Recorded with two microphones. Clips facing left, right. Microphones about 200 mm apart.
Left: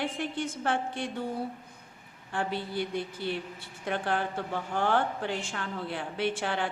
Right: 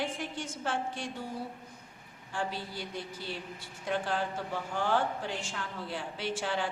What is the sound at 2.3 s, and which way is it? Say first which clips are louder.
A woman's voice: left 5 dB; 60° left (ahead or behind).